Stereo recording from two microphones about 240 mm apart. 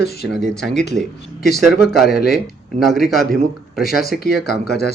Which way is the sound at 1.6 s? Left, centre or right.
Centre.